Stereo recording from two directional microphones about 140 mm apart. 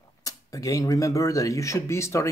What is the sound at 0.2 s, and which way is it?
Speech, 25° left (ahead or behind).